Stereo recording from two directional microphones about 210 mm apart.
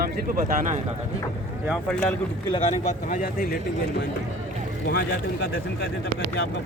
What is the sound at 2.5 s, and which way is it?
Speech, 30° left (ahead or behind).